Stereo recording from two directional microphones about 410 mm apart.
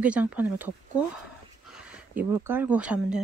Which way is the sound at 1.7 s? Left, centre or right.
Centre.